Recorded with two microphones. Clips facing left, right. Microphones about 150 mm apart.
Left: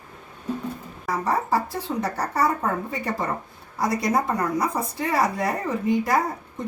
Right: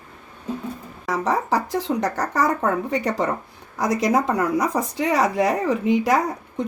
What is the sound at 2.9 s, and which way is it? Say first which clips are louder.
Speech: right 5 dB; 90° right.